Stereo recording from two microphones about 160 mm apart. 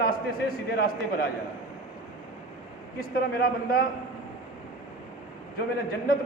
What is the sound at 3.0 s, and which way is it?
Speech, 70° left (ahead or behind).